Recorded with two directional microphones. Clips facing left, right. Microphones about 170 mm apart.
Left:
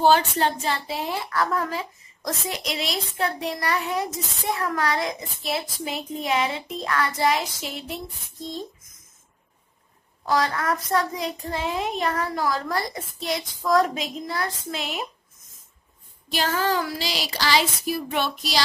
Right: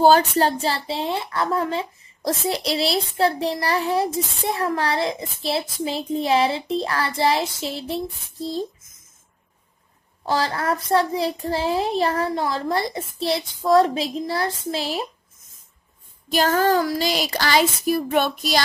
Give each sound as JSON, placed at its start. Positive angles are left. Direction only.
{"t": 0.0, "sound": "a woman's voice", "side_deg": -40}
{"t": 10.2, "sound": "a child's voice", "side_deg": -30}
{"t": 16.3, "sound": "a sound", "side_deg": -45}